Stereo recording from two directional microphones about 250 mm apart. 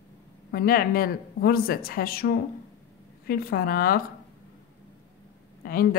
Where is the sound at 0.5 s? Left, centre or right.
Left.